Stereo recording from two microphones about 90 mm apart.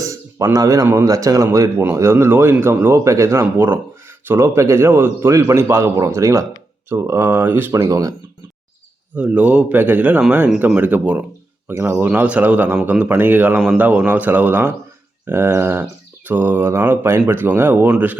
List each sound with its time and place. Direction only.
0.0 s a sound: 35° right (ahead or behind)
1.0 s a man's voice: 40° right (ahead or behind)
1.8 s mantra: 30° right (ahead or behind)
4.3 s a man's voice: 30° right (ahead or behind)
6.9 s mantra: 25° right (ahead or behind)
7.7 s a man's voice: 40° right (ahead or behind)
9.1 s speech: 15° right (ahead or behind)
10.8 s mantra: 20° right (ahead or behind)
12.0 s speech: 15° right (ahead or behind)
15.3 s mantra: 30° right (ahead or behind)